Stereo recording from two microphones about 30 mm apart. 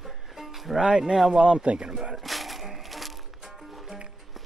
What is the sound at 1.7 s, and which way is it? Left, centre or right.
Speech, right.